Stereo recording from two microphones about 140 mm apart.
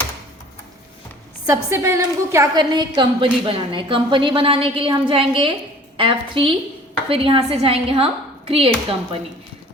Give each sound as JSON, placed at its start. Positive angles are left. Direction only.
{"t": 1.5, "sound": "a woman's voice", "side_deg": -20}
{"t": 2.7, "sound": "a woman's voice", "side_deg": -35}